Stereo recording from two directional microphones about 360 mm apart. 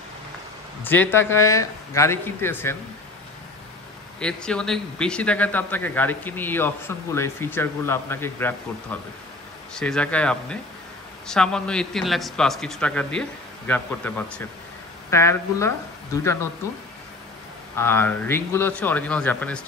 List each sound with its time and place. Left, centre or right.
0.8 s speech: centre
4.2 s a man's voice: centre
9.8 s a man's voice: centre
17.7 s a man's voice: centre